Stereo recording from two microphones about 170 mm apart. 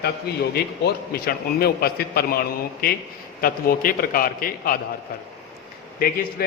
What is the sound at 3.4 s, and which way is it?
A man's voice, 60° left (ahead or behind).